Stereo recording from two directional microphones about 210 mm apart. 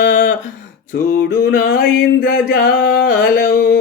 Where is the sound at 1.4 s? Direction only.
45° left (ahead or behind).